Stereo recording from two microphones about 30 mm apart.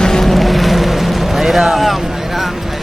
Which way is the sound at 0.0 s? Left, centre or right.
Centre.